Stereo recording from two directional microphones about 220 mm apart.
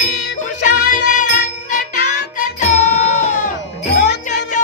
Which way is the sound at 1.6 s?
35° left (ahead or behind).